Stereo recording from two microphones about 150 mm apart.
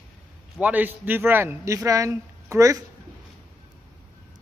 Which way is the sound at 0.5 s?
10° right (ahead or behind).